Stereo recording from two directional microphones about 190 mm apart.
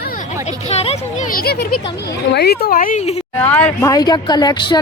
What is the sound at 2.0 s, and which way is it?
Speech, 60° left (ahead or behind).